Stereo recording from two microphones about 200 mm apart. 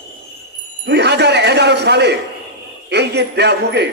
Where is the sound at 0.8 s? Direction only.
55° right (ahead or behind).